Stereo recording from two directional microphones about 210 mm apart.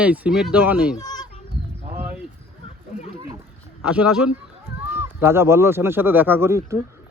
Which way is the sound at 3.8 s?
5° right (ahead or behind).